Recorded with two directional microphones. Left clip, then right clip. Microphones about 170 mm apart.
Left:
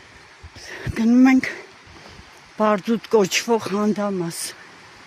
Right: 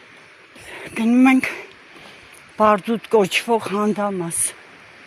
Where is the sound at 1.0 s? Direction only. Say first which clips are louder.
Right 1 dB; 15° left (ahead or behind).